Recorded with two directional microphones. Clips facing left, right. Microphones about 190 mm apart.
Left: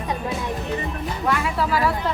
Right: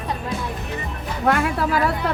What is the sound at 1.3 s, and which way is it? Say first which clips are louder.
Speech: right 3 dB; 55° right (ahead or behind).